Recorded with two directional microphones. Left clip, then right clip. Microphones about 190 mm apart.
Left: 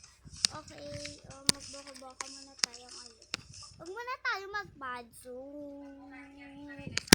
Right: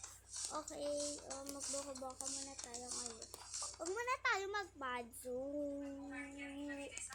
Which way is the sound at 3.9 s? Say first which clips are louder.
Left 3 dB; 5° left (ahead or behind).